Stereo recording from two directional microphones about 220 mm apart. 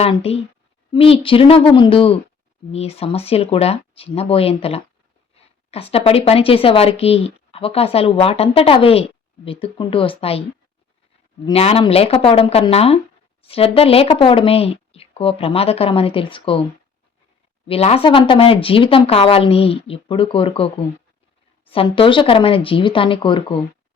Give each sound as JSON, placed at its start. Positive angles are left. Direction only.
{"t": 0.0, "sound": "speech", "side_deg": 25}
{"t": 11.4, "sound": "speech", "side_deg": 25}
{"t": 17.7, "sound": "speech", "side_deg": 25}
{"t": 21.7, "sound": "speech", "side_deg": 25}